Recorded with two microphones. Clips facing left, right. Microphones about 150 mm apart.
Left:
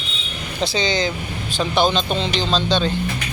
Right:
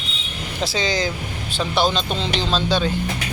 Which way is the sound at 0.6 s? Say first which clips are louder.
Left 2 dB; centre (ahead or behind).